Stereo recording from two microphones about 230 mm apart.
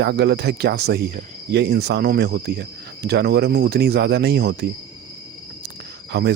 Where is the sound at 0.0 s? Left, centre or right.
Right.